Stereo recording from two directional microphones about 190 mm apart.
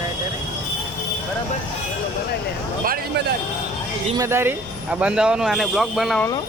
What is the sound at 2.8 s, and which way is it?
Speech, 55° right (ahead or behind).